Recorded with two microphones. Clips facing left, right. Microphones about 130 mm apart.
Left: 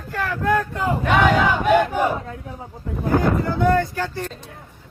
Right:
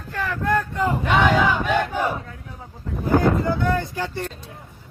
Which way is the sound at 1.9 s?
15° left (ahead or behind).